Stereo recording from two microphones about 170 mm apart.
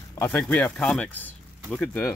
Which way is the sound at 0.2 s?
10° left (ahead or behind).